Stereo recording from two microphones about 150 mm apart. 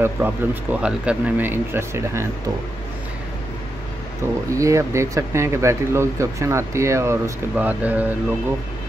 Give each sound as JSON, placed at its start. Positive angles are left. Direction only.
{"t": 0.0, "sound": "speech", "side_deg": -10}
{"t": 4.6, "sound": "speech", "side_deg": -20}